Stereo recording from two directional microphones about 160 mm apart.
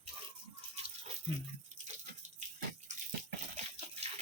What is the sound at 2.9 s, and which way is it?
Water, 50° right (ahead or behind).